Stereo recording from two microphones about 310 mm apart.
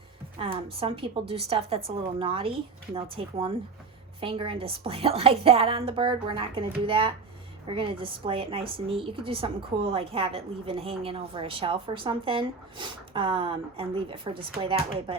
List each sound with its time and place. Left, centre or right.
0.3 s a woman's voice: centre